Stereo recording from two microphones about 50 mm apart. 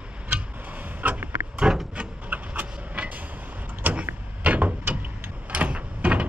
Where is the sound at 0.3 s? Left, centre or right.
Right.